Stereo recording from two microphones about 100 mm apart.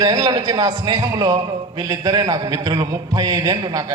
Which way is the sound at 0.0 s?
40° right (ahead or behind).